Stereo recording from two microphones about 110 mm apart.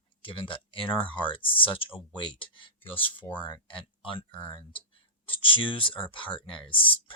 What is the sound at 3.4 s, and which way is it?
Speech, 50° left (ahead or behind).